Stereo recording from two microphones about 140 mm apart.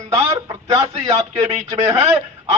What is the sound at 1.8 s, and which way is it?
Speech, 45° right (ahead or behind).